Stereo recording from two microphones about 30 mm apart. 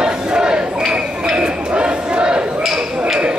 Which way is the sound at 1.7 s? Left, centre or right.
Right.